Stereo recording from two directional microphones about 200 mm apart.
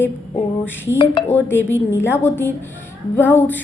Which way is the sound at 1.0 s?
25° left (ahead or behind).